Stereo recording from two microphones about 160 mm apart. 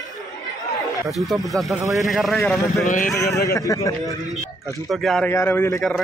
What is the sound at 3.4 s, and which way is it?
Speech, 20° left (ahead or behind).